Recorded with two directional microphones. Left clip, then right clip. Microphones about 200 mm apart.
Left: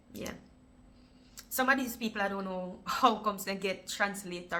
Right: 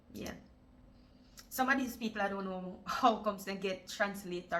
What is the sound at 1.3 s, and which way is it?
A woman's voice, 15° left (ahead or behind).